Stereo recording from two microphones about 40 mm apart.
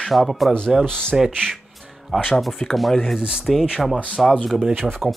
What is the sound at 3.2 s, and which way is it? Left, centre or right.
Speech, right.